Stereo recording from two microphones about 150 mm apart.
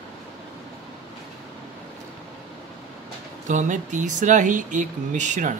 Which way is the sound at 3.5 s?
55° right (ahead or behind).